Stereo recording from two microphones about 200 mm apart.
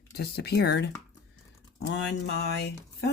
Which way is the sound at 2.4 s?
55° left (ahead or behind).